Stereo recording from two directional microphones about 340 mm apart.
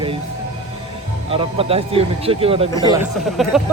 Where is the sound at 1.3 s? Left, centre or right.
Centre.